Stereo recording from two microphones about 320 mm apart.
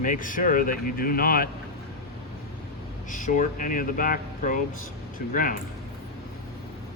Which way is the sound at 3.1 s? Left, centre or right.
Left.